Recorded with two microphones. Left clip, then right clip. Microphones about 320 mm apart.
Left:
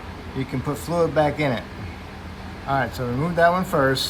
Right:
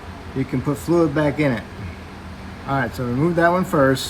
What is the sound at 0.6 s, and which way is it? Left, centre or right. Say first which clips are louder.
Speech: right 3 dB; left.